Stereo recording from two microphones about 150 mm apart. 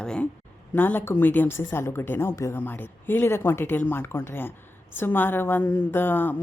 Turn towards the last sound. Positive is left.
turn(degrees=15)  # may be behind; listen again after turning